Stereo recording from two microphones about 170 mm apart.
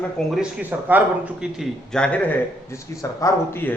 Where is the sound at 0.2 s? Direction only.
5° right (ahead or behind).